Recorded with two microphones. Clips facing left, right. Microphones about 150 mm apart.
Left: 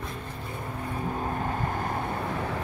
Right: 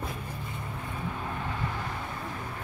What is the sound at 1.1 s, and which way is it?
Vehicle, 40° left (ahead or behind).